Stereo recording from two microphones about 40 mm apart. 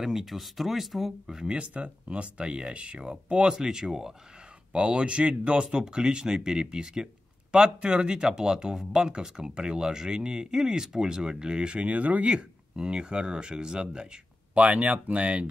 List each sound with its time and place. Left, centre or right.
0.0 s speech: centre
1.5 s speech: right; by 4.1 s centre
4.7 s speech: right
5.8 s speech: right
11.9 s speech: right
14.5 s speech: right